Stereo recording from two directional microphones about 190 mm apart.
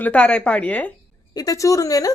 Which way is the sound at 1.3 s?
20° left (ahead or behind).